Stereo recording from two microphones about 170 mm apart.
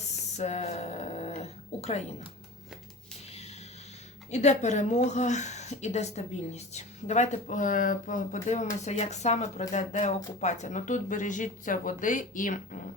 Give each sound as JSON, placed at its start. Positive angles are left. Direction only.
{"t": 0.3, "sound": "speech", "side_deg": 40}
{"t": 4.3, "sound": "a woman's voice", "side_deg": 40}